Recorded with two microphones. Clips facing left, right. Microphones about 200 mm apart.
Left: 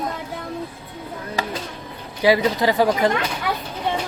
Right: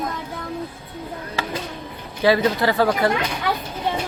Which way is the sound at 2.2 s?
15° left (ahead or behind).